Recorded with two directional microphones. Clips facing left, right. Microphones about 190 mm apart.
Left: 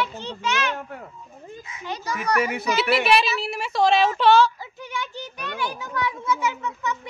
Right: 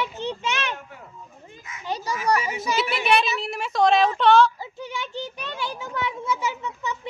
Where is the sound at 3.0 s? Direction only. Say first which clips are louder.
Left 1 dB; 5° left (ahead or behind).